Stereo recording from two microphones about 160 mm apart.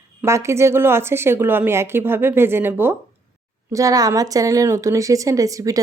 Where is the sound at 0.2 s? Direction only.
15° right (ahead or behind).